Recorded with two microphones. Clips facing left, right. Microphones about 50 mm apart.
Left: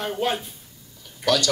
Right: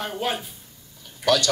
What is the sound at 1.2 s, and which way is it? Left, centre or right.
Speech, right.